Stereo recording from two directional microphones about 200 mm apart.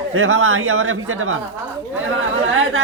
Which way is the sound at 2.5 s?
80° right.